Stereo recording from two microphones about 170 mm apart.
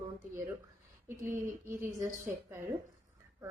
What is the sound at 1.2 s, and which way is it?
A woman's voice, 15° right (ahead or behind).